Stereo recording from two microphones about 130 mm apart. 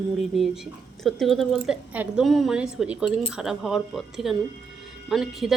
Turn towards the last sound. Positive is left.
turn(degrees=0)  # may be behind; listen again after turning